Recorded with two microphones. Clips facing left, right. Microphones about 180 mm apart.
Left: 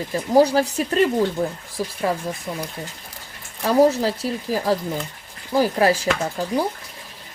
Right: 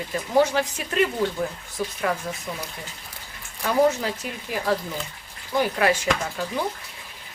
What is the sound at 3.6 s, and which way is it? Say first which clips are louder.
Speech: left 4 dB; 35° left (ahead or behind).